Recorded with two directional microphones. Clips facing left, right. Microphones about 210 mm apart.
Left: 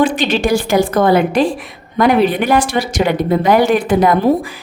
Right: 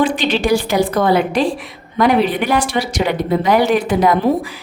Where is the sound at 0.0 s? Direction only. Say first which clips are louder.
Left 2 dB; 45° left (ahead or behind).